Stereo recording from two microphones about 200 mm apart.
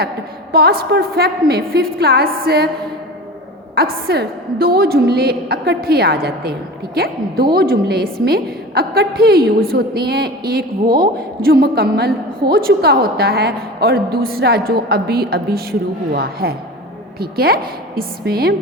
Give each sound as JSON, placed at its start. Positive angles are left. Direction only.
{"t": 0.5, "sound": "a woman's voice", "side_deg": -50}
{"t": 3.8, "sound": "a woman's voice", "side_deg": -50}